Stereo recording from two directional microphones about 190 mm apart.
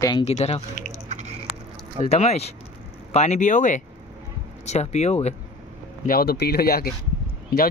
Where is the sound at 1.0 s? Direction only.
35° right (ahead or behind).